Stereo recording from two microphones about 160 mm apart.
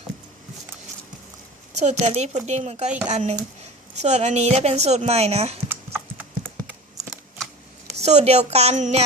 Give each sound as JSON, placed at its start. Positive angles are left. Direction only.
{"t": 1.7, "sound": "a woman's voice", "side_deg": -45}
{"t": 5.6, "sound": "typing", "side_deg": -15}
{"t": 7.9, "sound": "a woman's voice", "side_deg": -40}